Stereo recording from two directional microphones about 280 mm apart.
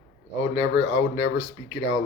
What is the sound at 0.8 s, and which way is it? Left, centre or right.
Speech, left.